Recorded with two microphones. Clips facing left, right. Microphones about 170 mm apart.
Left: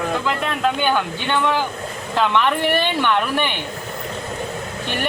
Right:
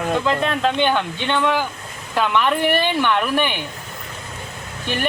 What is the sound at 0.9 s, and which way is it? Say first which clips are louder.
A woman's voice: even; 15° right (ahead or behind).